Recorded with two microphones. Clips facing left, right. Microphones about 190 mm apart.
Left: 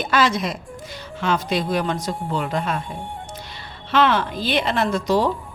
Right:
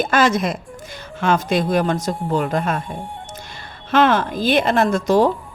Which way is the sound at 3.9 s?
45° right (ahead or behind).